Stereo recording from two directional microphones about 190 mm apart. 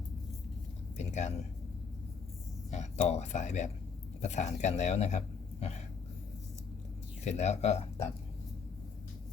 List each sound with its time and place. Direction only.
0.9 s a man's voice: 40° left (ahead or behind)
2.6 s a sound: 35° left (ahead or behind)
3.1 s speech: 35° left (ahead or behind)
7.3 s speech: 35° left (ahead or behind)